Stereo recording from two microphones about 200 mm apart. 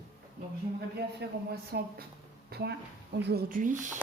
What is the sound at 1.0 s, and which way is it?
A man's voice, 55° right (ahead or behind).